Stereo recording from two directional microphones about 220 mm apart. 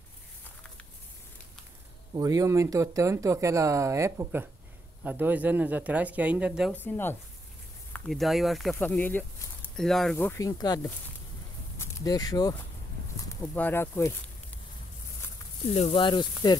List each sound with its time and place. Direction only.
2.1 s speech: 15° right (ahead or behind)
6.7 s speech: 10° left (ahead or behind)
15.7 s speech: 25° left (ahead or behind)